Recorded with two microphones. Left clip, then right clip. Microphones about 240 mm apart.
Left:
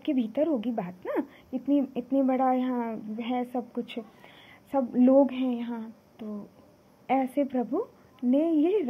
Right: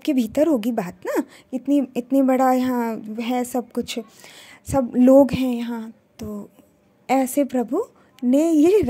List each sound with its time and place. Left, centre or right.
0.0 s a woman's voice: right